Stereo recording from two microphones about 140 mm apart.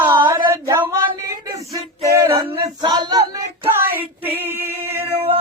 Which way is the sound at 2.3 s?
40° right (ahead or behind).